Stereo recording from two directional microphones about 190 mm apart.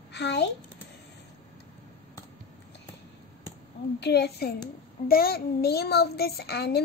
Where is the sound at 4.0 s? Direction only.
60° left (ahead or behind).